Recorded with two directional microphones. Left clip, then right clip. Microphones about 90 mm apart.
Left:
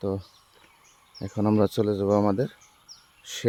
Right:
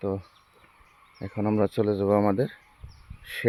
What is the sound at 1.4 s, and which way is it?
Speech, 70° left (ahead or behind).